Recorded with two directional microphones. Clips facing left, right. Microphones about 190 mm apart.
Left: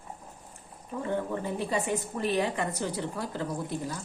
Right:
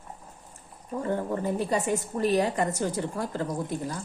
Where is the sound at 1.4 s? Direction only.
40° right (ahead or behind).